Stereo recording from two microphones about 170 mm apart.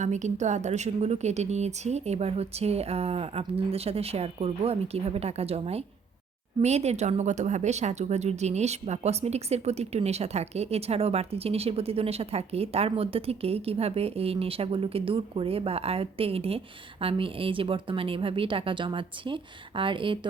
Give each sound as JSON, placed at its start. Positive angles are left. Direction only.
{"t": 0.0, "sound": "speech", "side_deg": -45}